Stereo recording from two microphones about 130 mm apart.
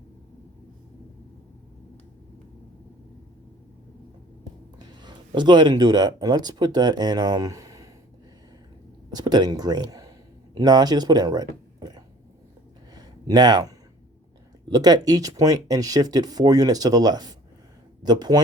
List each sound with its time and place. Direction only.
4.8 s speech: 35° right (ahead or behind)
9.0 s speech: 30° right (ahead or behind)
12.9 s a sound: 30° right (ahead or behind)
14.7 s speech: 30° right (ahead or behind)